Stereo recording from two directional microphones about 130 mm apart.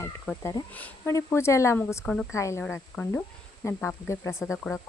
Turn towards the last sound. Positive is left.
turn(degrees=20)  # may be behind; listen again after turning